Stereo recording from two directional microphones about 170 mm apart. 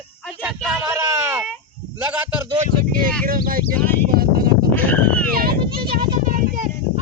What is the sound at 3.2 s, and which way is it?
Speech, 55° right (ahead or behind).